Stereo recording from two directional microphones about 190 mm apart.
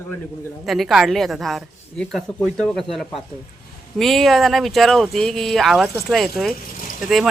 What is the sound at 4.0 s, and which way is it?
A man's voice, centre (ahead or behind).